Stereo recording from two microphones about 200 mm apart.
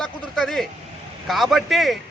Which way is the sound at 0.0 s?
Centre (ahead or behind).